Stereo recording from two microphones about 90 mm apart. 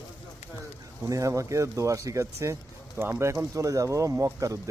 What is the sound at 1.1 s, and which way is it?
Speech, 35° right (ahead or behind).